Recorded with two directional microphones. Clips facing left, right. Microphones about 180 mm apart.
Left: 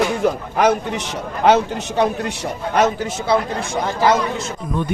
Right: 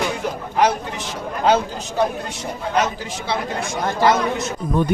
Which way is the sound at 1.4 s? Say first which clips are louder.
Left 3 dB; 75° left (ahead or behind).